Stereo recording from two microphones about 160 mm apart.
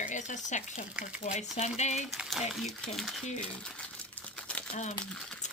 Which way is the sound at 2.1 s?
Centre (ahead or behind).